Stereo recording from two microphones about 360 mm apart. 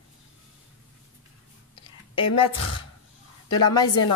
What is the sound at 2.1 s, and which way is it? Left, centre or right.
A woman's voice, centre.